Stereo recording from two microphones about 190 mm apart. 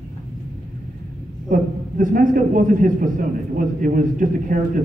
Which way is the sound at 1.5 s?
45° right (ahead or behind).